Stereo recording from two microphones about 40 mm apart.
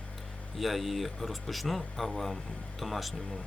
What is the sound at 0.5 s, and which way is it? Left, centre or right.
Speech, centre.